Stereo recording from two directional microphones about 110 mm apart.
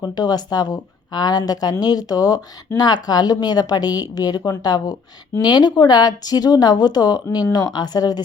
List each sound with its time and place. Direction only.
0.0 s speech: 40° left (ahead or behind)
7.3 s speech: 25° left (ahead or behind)
7.5 s speech: 40° left (ahead or behind)